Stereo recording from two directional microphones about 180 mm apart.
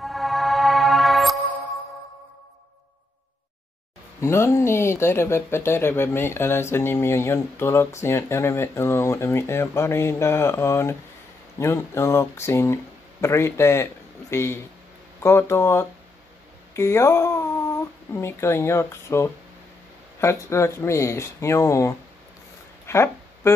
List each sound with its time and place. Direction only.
0.0 s music: centre (ahead or behind)
4.2 s speech: 15° left (ahead or behind)
22.8 s a sound: 15° left (ahead or behind)